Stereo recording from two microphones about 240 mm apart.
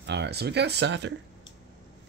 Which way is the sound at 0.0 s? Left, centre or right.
Right.